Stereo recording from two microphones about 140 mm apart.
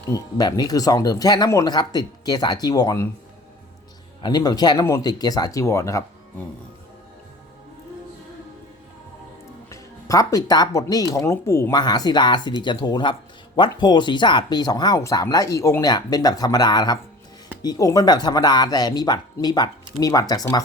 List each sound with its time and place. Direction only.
0.1 s speech: 30° left (ahead or behind)
4.2 s speech: 30° left (ahead or behind)
9.6 s speech: 25° left (ahead or behind)
11.8 s speech: 30° left (ahead or behind)